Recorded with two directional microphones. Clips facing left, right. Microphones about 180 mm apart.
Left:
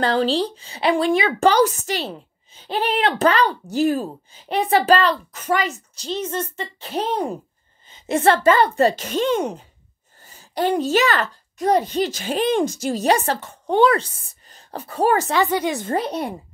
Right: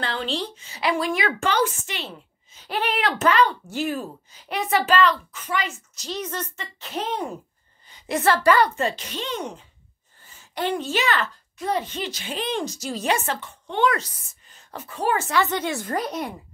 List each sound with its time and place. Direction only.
0.0 s a woman's voice: 40° left (ahead or behind)
5.9 s a woman's voice: 30° left (ahead or behind)
8.7 s a woman's voice: 40° left (ahead or behind)
13.0 s a woman's voice: 35° left (ahead or behind)
15.3 s a woman's voice: 15° left (ahead or behind); by 16.3 s 30° left (ahead or behind)